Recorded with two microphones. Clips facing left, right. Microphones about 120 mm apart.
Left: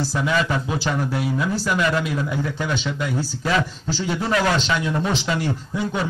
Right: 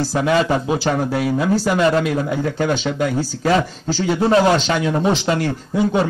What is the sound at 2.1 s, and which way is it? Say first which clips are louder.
Speech: right 5 dB; 50° right (ahead or behind).